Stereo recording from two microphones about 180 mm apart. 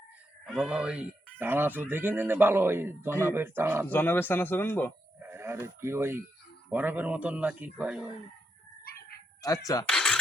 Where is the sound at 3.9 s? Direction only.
10° left (ahead or behind).